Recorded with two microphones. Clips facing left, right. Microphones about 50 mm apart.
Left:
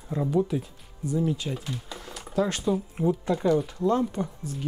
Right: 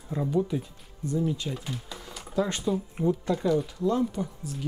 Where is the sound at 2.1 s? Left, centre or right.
Centre.